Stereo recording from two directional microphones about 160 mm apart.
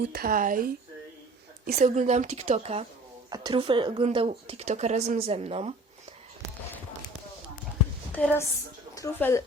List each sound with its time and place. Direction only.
0.1 s speech: 70° right (ahead or behind)
1.6 s a woman's voice: 50° right (ahead or behind)
3.2 s speech: 25° right (ahead or behind)
8.1 s speech: 10° left (ahead or behind)